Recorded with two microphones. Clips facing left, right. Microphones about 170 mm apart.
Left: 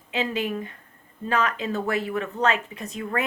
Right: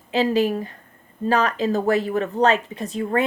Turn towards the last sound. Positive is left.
turn(degrees=-35)  # may be behind; listen again after turning